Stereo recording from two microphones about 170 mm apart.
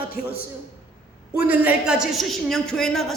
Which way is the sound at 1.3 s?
10° right (ahead or behind).